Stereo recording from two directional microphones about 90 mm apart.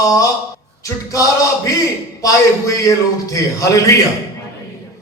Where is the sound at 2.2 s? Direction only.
40° left (ahead or behind).